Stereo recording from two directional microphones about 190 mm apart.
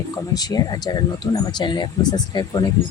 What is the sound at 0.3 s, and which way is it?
Speech, 20° left (ahead or behind).